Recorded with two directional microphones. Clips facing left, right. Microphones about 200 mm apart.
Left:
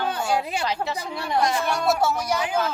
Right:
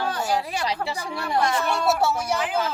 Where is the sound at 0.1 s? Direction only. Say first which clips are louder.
Left 1 dB; 25° left (ahead or behind).